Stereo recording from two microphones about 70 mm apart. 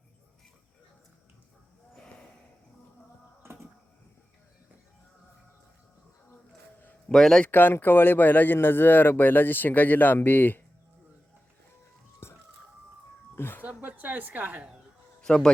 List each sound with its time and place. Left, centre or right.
2.0 s a sound: centre
7.1 s a man's voice: centre
7.5 s speech: left
12.2 s music: left
13.3 s a sound: left
13.6 s a woman's voice: right
15.2 s speech: centre